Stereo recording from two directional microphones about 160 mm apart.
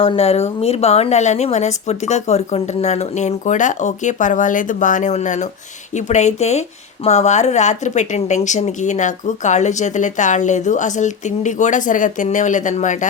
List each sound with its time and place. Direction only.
0.0 s speech: 35° left (ahead or behind)